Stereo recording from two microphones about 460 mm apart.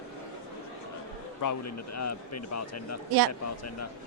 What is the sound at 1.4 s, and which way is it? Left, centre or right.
A man's voice, left.